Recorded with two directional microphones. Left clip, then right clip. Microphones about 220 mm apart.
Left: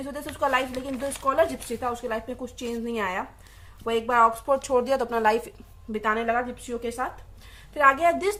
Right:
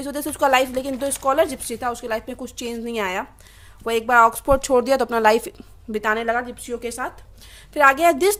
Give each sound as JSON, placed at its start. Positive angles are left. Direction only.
{"t": 0.0, "sound": "a woman's voice", "side_deg": -45}